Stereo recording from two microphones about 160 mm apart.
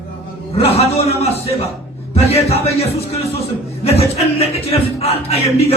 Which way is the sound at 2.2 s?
40° left (ahead or behind).